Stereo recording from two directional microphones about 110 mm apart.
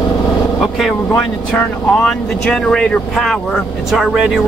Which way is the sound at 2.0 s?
5° left (ahead or behind).